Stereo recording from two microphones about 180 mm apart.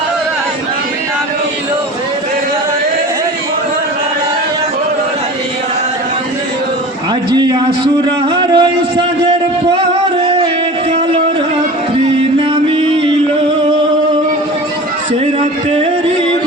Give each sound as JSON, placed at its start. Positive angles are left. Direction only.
{"t": 7.3, "sound": "speech", "side_deg": -25}
{"t": 9.7, "sound": "music", "side_deg": -30}
{"t": 12.6, "sound": "music", "side_deg": -30}